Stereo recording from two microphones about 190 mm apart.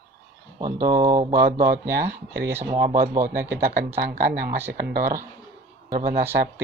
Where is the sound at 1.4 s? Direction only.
55° right (ahead or behind).